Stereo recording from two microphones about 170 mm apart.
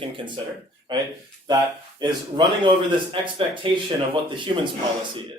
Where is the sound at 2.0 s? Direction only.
25° right (ahead or behind).